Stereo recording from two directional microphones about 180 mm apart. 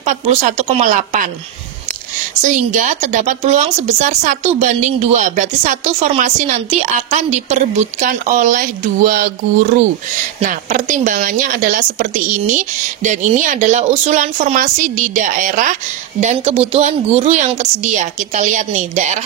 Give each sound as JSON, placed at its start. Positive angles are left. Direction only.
{"t": 0.0, "sound": "speech", "side_deg": -40}
{"t": 2.4, "sound": "speech", "side_deg": -45}